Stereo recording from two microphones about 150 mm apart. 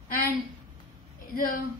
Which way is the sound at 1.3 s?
70° left (ahead or behind).